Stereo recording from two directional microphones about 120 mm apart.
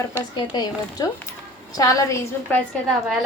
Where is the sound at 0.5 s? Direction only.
35° left (ahead or behind).